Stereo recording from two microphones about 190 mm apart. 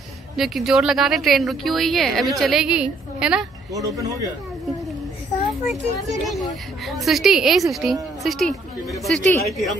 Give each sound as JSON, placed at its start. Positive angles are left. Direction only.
{"t": 0.4, "sound": "speech", "side_deg": 0}
{"t": 3.7, "sound": "speech", "side_deg": -15}
{"t": 6.0, "sound": "speech", "side_deg": 0}